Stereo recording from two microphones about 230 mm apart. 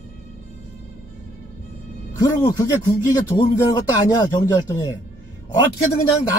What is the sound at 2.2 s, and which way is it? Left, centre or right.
Speech, centre.